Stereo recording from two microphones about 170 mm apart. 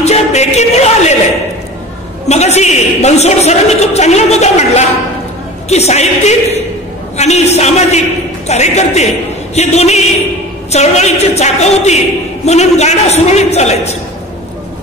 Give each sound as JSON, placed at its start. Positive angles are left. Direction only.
{"t": 0.0, "sound": "music", "side_deg": 40}
{"t": 2.2, "sound": "a man's voice", "side_deg": 40}